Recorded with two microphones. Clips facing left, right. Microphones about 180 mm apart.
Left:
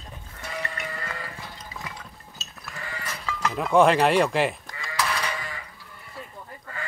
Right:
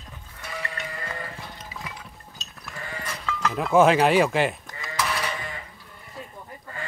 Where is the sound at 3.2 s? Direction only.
Centre (ahead or behind).